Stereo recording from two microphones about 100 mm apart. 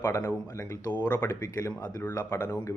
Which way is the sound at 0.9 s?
20° left (ahead or behind).